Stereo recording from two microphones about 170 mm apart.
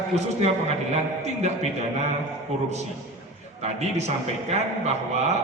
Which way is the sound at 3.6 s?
40° right (ahead or behind).